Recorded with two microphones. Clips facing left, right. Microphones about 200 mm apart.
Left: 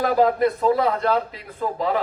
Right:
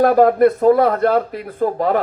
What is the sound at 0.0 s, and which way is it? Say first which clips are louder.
A man's voice: right 7 dB; 55° right (ahead or behind).